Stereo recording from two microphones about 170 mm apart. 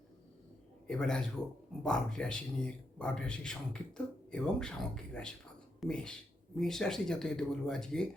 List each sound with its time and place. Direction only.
0.9 s a man's voice: 5° left (ahead or behind)